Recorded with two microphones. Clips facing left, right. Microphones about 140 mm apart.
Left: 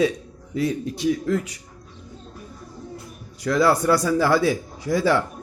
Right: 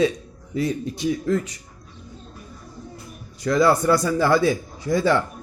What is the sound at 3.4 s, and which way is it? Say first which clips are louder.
A man's voice: right 1 dB; 5° left (ahead or behind).